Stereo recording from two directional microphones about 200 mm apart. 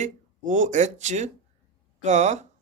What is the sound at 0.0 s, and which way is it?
Speech, 40° right (ahead or behind).